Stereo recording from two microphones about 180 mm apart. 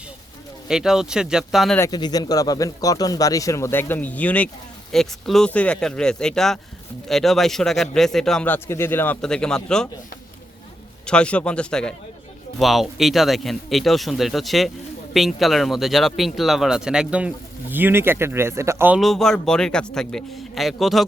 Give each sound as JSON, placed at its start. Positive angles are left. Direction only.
{"t": 0.7, "sound": "speech", "side_deg": -5}
{"t": 1.8, "sound": "speech", "side_deg": 20}
{"t": 11.0, "sound": "speech", "side_deg": 5}
{"t": 18.9, "sound": "speech", "side_deg": 0}